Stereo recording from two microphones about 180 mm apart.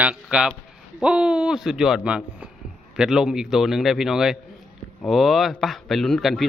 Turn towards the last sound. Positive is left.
turn(degrees=0)  # may be behind; listen again after turning